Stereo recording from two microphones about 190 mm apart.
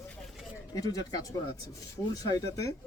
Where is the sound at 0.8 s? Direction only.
20° left (ahead or behind).